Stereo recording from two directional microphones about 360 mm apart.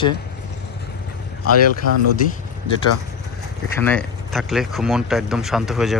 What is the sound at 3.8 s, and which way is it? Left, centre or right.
Speech, centre.